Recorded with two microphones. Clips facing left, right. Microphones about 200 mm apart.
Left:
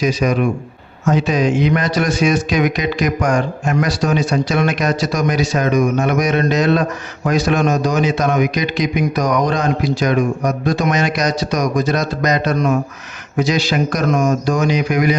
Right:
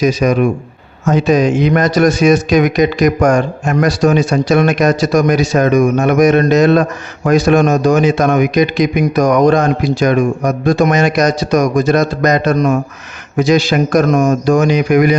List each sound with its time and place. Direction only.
0.0 s a man's voice: 45° right (ahead or behind)